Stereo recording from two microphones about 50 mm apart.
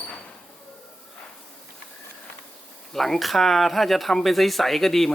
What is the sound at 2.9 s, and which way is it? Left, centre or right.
Speech, centre.